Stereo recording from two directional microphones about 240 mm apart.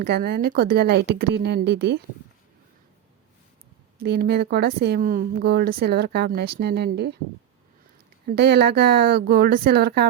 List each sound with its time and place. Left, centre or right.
0.0 s speech: right
4.0 s speech: right
8.3 s speech: right